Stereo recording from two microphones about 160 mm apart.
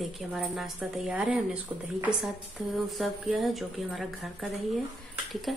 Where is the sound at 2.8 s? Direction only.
Centre (ahead or behind).